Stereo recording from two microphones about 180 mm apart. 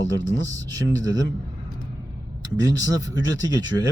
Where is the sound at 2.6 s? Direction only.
90° left.